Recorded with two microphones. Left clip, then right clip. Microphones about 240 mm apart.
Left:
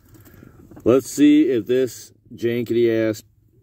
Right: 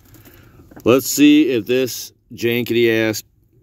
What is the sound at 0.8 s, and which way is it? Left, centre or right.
Speech, centre.